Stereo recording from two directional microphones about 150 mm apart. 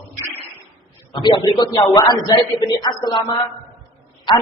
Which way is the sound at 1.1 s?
30° left (ahead or behind).